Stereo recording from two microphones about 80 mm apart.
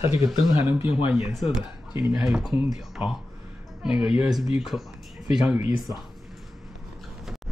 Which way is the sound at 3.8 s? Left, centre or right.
Centre.